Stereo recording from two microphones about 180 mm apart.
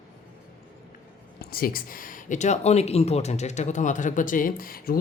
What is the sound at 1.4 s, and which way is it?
Speech, 55° left (ahead or behind).